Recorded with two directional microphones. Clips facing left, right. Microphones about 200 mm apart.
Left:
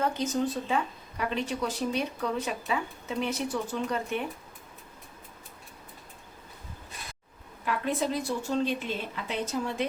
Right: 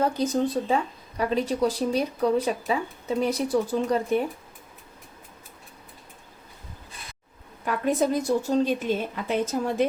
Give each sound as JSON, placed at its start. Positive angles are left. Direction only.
{"t": 0.0, "sound": "speech", "side_deg": -35}
{"t": 7.6, "sound": "a woman's voice", "side_deg": -45}